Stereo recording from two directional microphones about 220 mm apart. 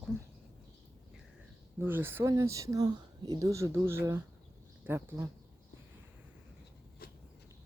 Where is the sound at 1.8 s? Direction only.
10° right (ahead or behind).